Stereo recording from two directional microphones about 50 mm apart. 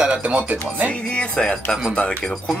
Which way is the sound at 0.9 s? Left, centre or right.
Left.